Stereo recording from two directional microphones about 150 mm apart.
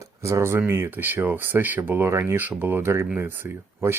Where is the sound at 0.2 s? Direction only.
20° right (ahead or behind).